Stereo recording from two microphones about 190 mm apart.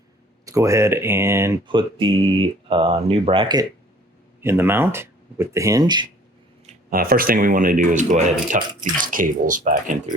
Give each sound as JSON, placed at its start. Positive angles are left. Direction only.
{"t": 0.4, "sound": "speech", "side_deg": -15}
{"t": 1.6, "sound": "speech", "side_deg": -25}
{"t": 4.4, "sound": "speech", "side_deg": -10}
{"t": 6.9, "sound": "speech", "side_deg": -50}